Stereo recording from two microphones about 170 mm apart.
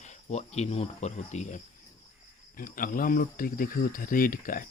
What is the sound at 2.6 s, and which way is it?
Speech, 55° left (ahead or behind).